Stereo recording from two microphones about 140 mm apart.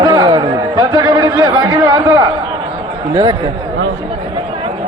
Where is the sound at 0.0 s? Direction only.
30° right (ahead or behind).